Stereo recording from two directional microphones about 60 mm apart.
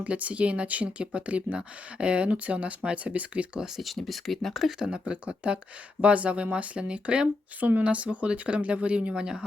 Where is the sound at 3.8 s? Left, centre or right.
Centre.